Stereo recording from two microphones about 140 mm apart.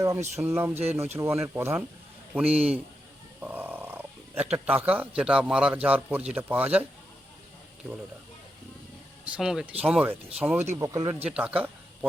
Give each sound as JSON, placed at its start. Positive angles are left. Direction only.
{"t": 0.0, "sound": "a man's voice", "side_deg": -20}
{"t": 3.4, "sound": "purr", "side_deg": -10}
{"t": 4.5, "sound": "a man's voice", "side_deg": -10}
{"t": 9.2, "sound": "a man's voice", "side_deg": -5}
{"t": 10.8, "sound": "speech", "side_deg": -25}
{"t": 11.2, "sound": "a man's voice", "side_deg": -10}